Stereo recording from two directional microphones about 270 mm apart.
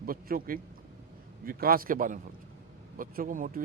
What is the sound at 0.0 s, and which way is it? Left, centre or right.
A man's voice, right.